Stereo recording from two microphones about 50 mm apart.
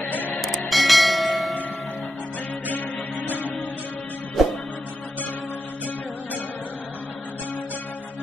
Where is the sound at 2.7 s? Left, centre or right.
Left.